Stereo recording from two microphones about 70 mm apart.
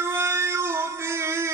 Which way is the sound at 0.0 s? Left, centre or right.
Right.